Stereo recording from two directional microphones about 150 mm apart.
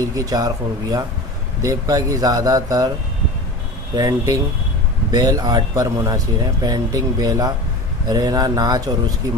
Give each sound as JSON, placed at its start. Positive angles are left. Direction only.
{"t": 0.1, "sound": "speech", "side_deg": -25}
{"t": 3.9, "sound": "speech", "side_deg": -25}